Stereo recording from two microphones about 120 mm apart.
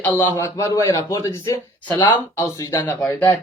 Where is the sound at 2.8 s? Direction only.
15° left (ahead or behind).